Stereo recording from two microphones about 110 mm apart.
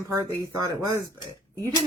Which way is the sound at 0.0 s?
30° right (ahead or behind).